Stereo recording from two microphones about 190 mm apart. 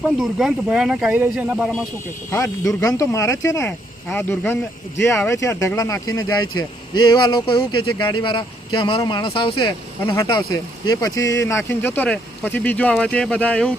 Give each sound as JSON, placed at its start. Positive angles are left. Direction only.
{"t": 0.2, "sound": "speech", "side_deg": 0}
{"t": 2.3, "sound": "speech", "side_deg": 15}